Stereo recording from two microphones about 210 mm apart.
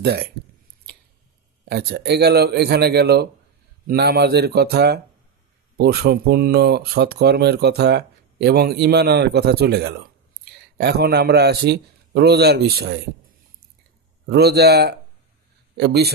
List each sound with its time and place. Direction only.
0.0 s speech: 50° right (ahead or behind)
1.7 s speech: 50° right (ahead or behind)
14.3 s speech: 50° right (ahead or behind)